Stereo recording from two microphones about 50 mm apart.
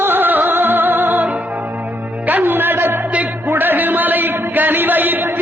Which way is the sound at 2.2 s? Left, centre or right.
Right.